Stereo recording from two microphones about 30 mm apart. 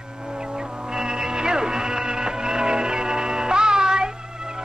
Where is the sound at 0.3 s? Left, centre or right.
Right.